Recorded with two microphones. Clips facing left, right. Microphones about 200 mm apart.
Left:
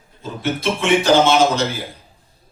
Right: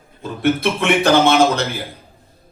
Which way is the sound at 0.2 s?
60° right (ahead or behind).